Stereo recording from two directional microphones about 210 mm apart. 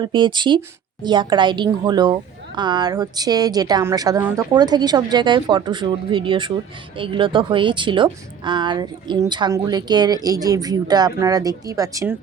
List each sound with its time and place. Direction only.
0.0 s a woman's voice: 20° right (ahead or behind)